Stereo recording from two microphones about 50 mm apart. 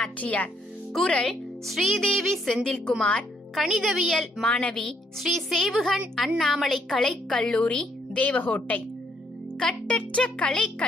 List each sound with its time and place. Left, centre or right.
0.2 s speech: left
0.9 s a woman's voice: centre
1.7 s music: centre
2.5 s a woman's voice: centre
3.5 s music: centre
4.5 s a woman's voice: left
5.2 s music: centre
7.0 s a woman's voice: centre; by 8.8 s left
9.8 s a woman's voice: left